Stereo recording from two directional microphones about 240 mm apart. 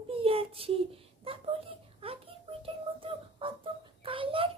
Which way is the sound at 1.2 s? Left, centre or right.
Right.